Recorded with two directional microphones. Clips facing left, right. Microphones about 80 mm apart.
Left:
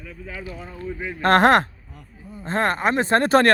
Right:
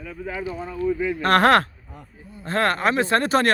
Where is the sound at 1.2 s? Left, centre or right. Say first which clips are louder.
Left 2 dB; left.